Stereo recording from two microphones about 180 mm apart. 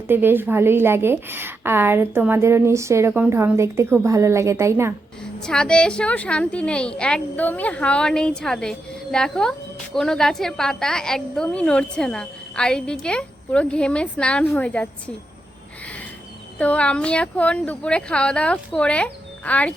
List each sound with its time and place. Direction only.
0.1 s a woman's voice: 10° right (ahead or behind)
5.4 s a woman's voice: 5° left (ahead or behind)
16.6 s speech: 5° left (ahead or behind)